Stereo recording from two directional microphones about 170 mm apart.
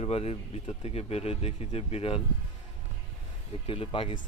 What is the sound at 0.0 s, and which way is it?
Speech, 35° left (ahead or behind).